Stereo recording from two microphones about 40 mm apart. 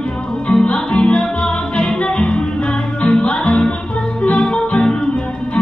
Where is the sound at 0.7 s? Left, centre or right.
Left.